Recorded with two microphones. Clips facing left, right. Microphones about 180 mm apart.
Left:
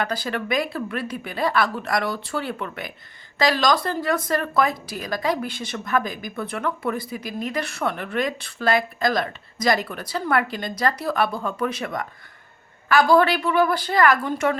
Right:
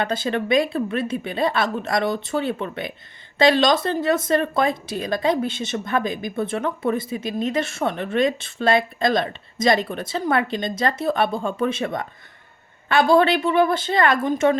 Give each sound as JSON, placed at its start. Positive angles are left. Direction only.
{"t": 0.0, "sound": "speech", "side_deg": -25}